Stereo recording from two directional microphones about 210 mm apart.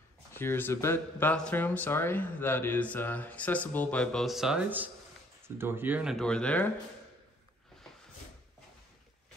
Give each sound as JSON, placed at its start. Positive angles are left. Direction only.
{"t": 0.3, "sound": "speech", "side_deg": 10}